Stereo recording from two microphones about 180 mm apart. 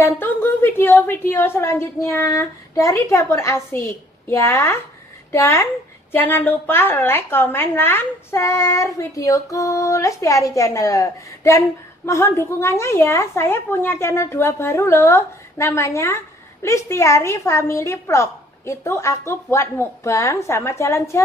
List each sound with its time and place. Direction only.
0.0 s a woman's voice: 10° left (ahead or behind)